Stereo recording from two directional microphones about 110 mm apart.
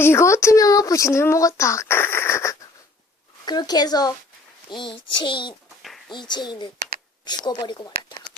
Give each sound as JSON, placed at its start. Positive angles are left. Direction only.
{"t": 0.0, "sound": "speech", "side_deg": 25}
{"t": 3.4, "sound": "a child's voice", "side_deg": 40}